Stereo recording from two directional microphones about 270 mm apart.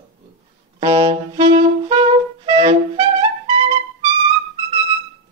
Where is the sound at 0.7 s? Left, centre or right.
Centre.